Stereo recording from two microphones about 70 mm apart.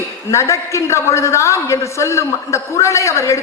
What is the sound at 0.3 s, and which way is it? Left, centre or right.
A woman's voice, left.